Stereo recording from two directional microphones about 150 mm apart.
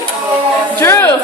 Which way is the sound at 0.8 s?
15° left (ahead or behind).